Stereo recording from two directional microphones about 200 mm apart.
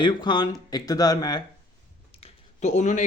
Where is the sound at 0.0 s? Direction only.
20° left (ahead or behind).